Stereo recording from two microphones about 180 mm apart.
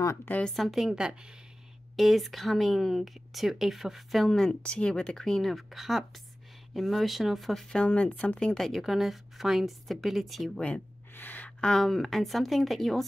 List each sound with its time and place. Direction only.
0.0 s speech: 15° left (ahead or behind)